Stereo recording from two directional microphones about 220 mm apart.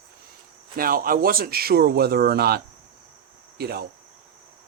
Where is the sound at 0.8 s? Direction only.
40° right (ahead or behind).